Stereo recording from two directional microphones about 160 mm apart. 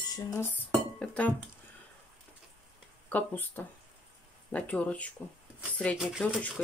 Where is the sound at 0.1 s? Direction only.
15° left (ahead or behind).